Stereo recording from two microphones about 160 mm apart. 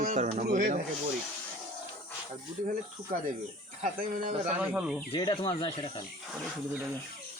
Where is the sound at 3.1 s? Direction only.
55° right (ahead or behind).